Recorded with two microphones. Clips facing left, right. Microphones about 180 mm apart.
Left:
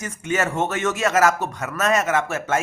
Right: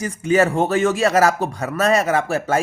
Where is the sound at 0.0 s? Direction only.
35° right (ahead or behind).